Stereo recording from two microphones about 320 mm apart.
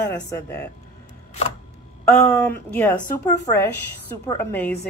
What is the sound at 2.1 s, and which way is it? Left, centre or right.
Speech, centre.